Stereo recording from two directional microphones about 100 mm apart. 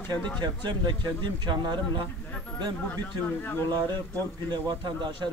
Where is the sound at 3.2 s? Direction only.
20° left (ahead or behind).